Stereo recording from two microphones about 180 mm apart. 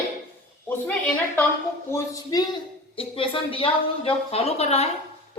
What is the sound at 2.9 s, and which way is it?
Speech, 30° left (ahead or behind).